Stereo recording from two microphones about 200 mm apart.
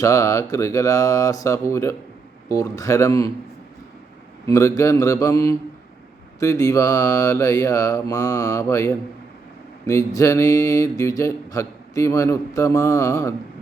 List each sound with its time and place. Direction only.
0.0 s speech: 15° left (ahead or behind)
4.4 s speech: 15° left (ahead or behind)